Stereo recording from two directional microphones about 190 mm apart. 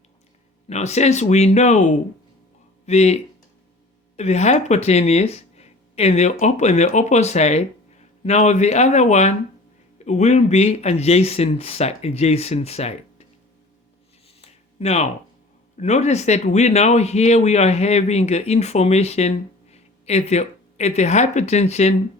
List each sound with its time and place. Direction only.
0.7 s speech: 35° left (ahead or behind)
4.2 s speech: 35° left (ahead or behind)
14.4 s a sound: 35° left (ahead or behind)
15.8 s speech: 35° left (ahead or behind)